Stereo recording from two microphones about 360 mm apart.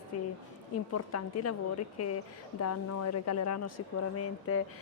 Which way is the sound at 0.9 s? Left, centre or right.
Left.